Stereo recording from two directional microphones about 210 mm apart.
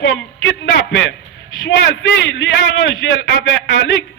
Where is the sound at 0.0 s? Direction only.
60° left (ahead or behind).